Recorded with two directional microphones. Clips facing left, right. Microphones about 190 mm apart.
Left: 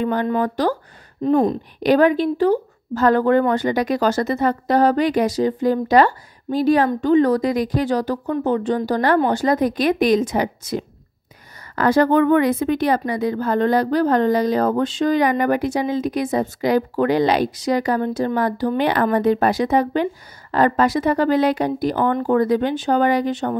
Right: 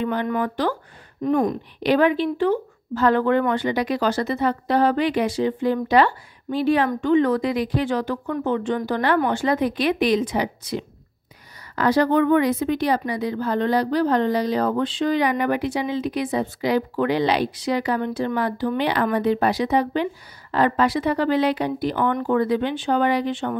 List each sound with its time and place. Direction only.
0.0 s speech: 45° left (ahead or behind)
1.2 s speech: 30° left (ahead or behind)
1.8 s speech: 45° left (ahead or behind)